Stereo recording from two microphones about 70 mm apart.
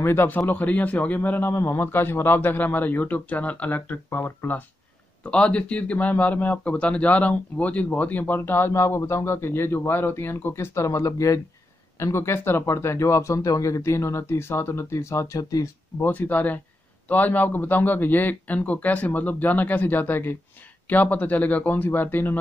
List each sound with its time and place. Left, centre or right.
0.0 s speech: left
1.5 s speech: left
5.2 s speech: centre; by 12.4 s left
12.4 s speech: left
16.0 s speech: left